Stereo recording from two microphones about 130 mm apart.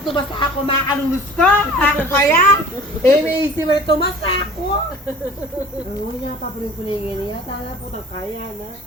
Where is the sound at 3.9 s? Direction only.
40° left (ahead or behind).